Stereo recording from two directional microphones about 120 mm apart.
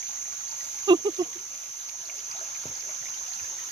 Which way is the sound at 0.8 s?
35° right (ahead or behind).